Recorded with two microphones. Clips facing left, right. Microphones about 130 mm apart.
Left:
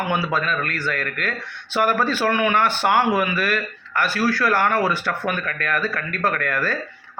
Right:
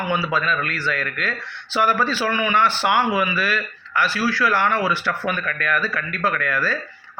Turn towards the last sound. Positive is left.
turn(degrees=50)  # may be behind; listen again after turning